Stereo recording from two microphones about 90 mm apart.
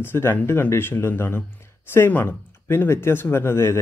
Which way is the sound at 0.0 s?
25° left (ahead or behind).